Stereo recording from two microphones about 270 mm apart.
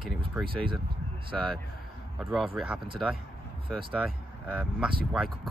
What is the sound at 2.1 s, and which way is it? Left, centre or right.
Speech, centre.